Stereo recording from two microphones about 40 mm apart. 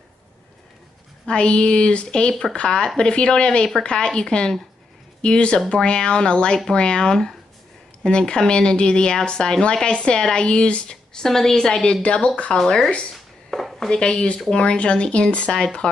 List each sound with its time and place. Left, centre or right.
1.2 s speech: left
11.1 s a woman's voice: centre; by 12.3 s left
12.6 s a woman's voice: centre
13.1 s a sound: centre
13.8 s speech: left